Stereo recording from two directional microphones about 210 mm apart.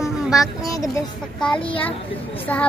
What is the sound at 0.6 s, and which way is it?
Speech, 15° left (ahead or behind).